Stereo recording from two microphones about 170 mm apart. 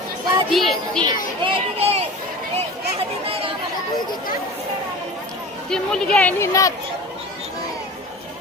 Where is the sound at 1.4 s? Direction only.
35° right (ahead or behind).